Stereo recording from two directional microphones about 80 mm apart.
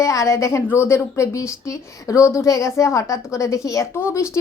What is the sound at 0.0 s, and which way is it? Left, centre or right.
A woman's voice, left.